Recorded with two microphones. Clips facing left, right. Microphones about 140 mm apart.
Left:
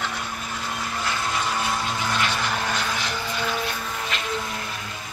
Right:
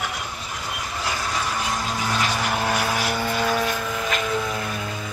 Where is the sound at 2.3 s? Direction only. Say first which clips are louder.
Right 3 dB; 10° right (ahead or behind).